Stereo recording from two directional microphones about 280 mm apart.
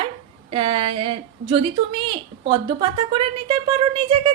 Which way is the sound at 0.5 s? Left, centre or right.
Centre.